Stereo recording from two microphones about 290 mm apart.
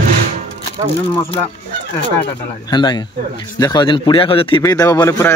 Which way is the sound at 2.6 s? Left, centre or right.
Centre.